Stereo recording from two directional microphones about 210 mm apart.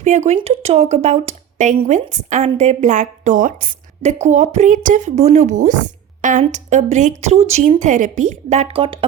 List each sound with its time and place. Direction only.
0.0 s speech: 35° right (ahead or behind)